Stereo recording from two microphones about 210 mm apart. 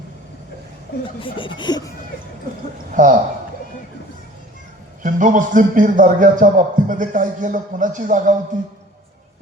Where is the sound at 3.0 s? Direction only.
40° right (ahead or behind).